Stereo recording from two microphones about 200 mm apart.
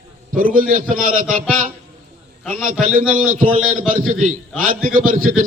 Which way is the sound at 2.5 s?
40° right (ahead or behind).